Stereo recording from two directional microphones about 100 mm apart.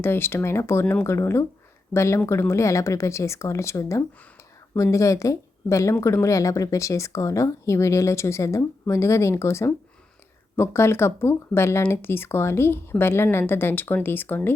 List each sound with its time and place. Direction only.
0.0 s speech: 25° left (ahead or behind)